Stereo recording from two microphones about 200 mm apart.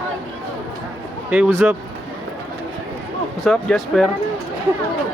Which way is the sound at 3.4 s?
Centre (ahead or behind).